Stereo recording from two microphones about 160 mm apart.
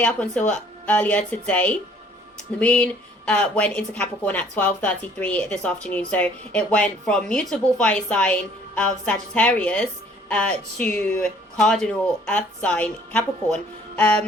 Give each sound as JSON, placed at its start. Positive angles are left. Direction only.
{"t": 0.0, "sound": "a woman's voice", "side_deg": 10}